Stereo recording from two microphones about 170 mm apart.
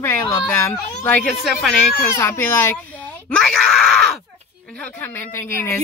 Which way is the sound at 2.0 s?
15° left (ahead or behind).